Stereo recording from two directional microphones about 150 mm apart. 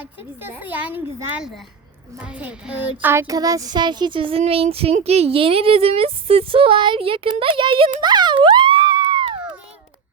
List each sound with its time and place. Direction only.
0.0 s a woman's voice: 10° right (ahead or behind)
3.0 s child singing: 15° right (ahead or behind); by 9.4 s 30° right (ahead or behind)